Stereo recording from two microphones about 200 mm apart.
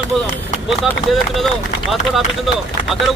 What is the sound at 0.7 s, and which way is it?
Speech, centre (ahead or behind).